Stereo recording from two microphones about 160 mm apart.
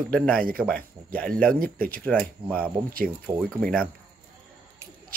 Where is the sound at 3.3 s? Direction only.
20° right (ahead or behind).